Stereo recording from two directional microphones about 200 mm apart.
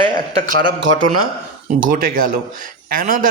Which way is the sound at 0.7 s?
70° right (ahead or behind).